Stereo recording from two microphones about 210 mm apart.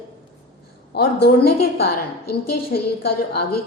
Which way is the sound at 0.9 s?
50° left (ahead or behind).